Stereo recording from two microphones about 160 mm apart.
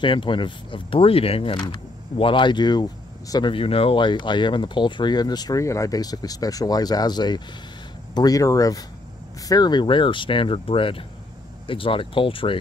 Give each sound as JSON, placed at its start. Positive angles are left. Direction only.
{"t": 0.0, "sound": "speech", "side_deg": 30}